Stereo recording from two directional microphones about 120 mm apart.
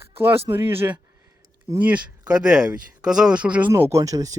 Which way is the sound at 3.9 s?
25° right (ahead or behind).